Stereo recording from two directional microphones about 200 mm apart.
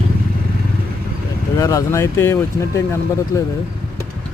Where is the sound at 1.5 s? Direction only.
15° left (ahead or behind).